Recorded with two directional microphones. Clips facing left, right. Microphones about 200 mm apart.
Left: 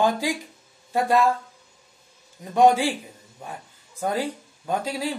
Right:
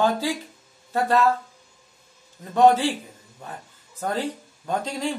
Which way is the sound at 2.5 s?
10° left (ahead or behind).